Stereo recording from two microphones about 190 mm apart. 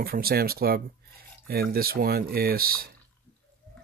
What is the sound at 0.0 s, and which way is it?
Speech, 50° right (ahead or behind).